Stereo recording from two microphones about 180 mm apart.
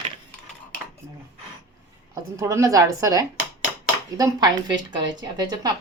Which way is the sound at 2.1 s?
20° right (ahead or behind).